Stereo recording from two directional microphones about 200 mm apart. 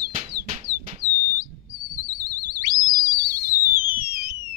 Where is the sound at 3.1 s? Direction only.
45° right (ahead or behind).